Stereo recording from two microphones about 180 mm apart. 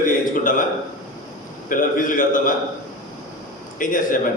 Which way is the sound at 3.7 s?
50° left (ahead or behind).